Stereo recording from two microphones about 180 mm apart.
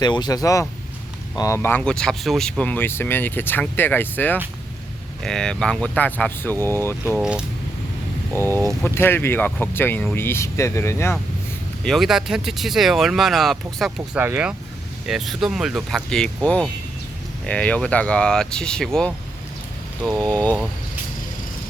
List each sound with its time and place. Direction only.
0.0 s speech: 25° left (ahead or behind)
7.2 s speech: 5° right (ahead or behind)
8.3 s speech: 15° left (ahead or behind)
11.8 s speech: centre (ahead or behind)
20.2 s speech: 10° left (ahead or behind)